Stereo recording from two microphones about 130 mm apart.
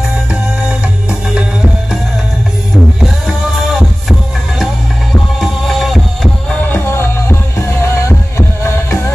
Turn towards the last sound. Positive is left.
turn(degrees=20)  # may be behind; listen again after turning